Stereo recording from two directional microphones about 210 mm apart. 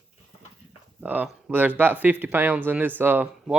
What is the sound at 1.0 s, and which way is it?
Speech, 10° right (ahead or behind).